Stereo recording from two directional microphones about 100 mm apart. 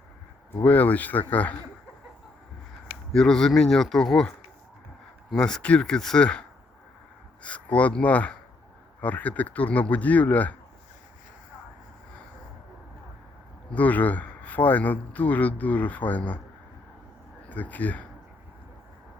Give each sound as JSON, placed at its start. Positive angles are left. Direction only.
{"t": 0.6, "sound": "speech", "side_deg": 15}
{"t": 3.1, "sound": "speech", "side_deg": 5}
{"t": 7.4, "sound": "speech", "side_deg": 15}
{"t": 13.7, "sound": "speech", "side_deg": 15}
{"t": 17.5, "sound": "speech", "side_deg": 15}